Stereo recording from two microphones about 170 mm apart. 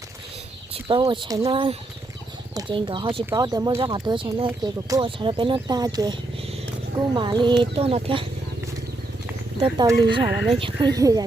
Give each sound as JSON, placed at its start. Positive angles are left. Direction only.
{"t": 0.7, "sound": "speech", "side_deg": -30}
{"t": 9.7, "sound": "speech", "side_deg": -25}
{"t": 10.2, "sound": "speech", "side_deg": -10}
{"t": 10.5, "sound": "speech", "side_deg": -30}